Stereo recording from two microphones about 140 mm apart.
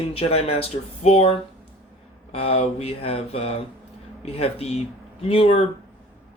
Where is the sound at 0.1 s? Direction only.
45° left (ahead or behind).